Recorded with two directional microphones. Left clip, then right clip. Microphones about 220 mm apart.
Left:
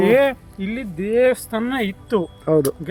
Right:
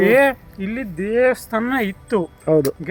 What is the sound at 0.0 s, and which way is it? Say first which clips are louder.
Speech: right 1 dB; 10° right (ahead or behind).